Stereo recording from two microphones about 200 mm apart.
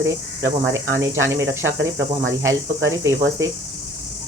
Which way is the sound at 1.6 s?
70° right (ahead or behind).